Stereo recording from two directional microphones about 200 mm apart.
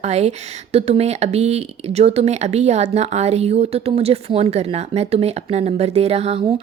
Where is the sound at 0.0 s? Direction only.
35° right (ahead or behind).